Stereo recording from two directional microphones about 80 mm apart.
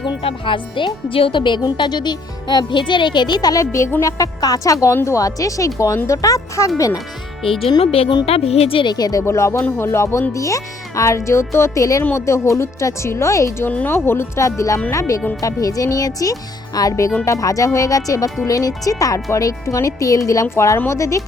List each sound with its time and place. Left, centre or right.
0.4 s speech: left
3.6 s speech: left
7.4 s speech: left
8.7 s speech: left
9.2 s speech: left
13.7 s speech: left